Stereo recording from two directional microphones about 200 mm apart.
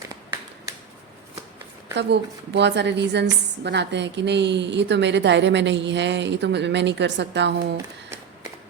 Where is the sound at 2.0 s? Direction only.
60° right (ahead or behind).